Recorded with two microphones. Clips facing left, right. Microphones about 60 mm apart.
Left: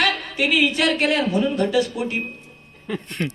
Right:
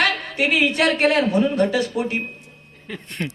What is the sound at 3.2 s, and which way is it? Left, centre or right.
Speech, centre.